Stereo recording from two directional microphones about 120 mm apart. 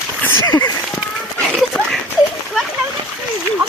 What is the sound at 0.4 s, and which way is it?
Speech, 35° left (ahead or behind).